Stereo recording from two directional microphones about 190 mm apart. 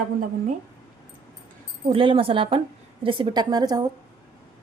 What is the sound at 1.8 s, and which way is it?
A woman's voice, 25° right (ahead or behind).